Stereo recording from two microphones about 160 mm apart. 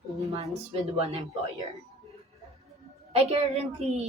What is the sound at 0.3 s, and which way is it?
Speech, 40° right (ahead or behind).